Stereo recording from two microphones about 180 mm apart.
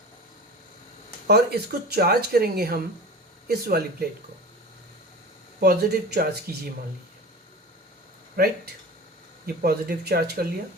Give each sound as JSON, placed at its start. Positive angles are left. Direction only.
{"t": 1.3, "sound": "speech", "side_deg": -60}
{"t": 5.5, "sound": "speech", "side_deg": -60}
{"t": 8.4, "sound": "speech", "side_deg": -55}
{"t": 9.6, "sound": "speech", "side_deg": -55}